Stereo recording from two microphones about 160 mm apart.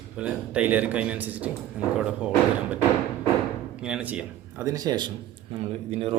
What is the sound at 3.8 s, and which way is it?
Speech, 5° right (ahead or behind).